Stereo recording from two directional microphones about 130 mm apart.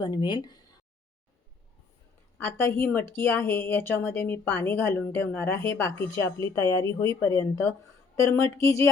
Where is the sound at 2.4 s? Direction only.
20° left (ahead or behind).